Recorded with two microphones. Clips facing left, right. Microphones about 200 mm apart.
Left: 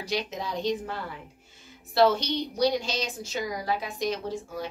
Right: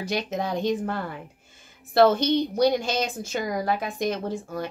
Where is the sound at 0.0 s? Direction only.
50° right (ahead or behind).